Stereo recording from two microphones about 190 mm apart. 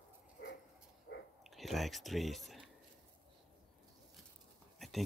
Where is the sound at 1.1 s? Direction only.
65° left (ahead or behind).